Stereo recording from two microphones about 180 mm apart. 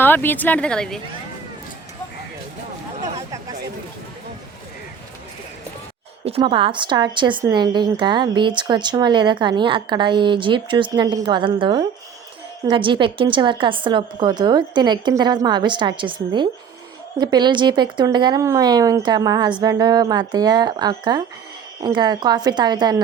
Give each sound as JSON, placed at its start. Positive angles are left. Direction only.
{"t": 0.0, "sound": "speech", "side_deg": 10}
{"t": 6.2, "sound": "a woman's voice", "side_deg": -30}